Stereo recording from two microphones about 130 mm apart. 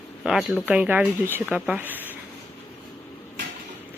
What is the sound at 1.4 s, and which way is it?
Speech, 5° right (ahead or behind).